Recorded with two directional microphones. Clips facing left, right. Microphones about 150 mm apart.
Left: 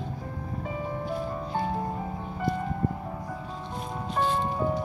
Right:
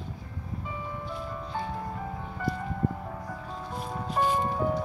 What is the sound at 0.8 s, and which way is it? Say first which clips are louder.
Music: left 6 dB; 45° left (ahead or behind).